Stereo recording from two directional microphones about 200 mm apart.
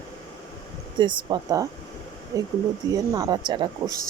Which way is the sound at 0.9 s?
20° right (ahead or behind).